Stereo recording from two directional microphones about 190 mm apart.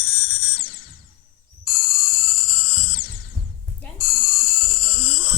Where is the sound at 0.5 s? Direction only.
50° left (ahead or behind).